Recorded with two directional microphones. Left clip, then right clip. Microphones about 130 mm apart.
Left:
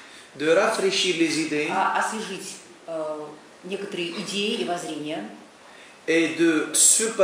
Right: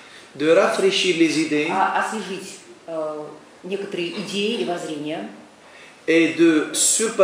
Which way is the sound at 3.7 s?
15° left (ahead or behind).